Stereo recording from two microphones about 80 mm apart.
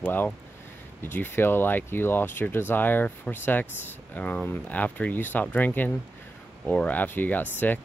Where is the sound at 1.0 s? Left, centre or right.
Left.